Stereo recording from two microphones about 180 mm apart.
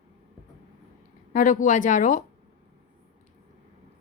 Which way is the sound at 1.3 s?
45° left (ahead or behind).